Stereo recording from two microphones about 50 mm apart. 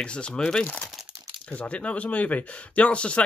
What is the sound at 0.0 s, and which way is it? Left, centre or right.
Speech, centre.